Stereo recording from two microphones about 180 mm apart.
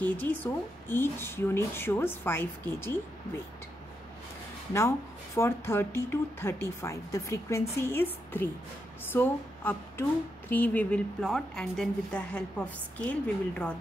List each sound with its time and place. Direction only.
0.0 s a woman's voice: 10° left (ahead or behind)
4.7 s a woman's voice: 15° left (ahead or behind)